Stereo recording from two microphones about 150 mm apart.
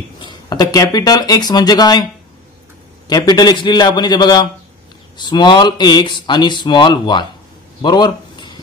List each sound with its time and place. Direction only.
0.2 s speech: 30° left (ahead or behind)
3.1 s a man's voice: 25° left (ahead or behind)
7.8 s a sound: 30° left (ahead or behind)